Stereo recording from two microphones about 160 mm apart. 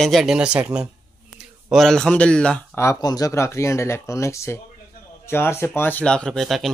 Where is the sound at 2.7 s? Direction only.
20° left (ahead or behind).